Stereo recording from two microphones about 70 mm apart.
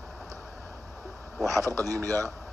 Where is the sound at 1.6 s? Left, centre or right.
Right.